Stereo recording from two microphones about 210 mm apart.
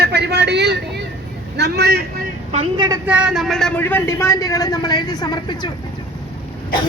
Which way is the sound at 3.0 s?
5° right (ahead or behind).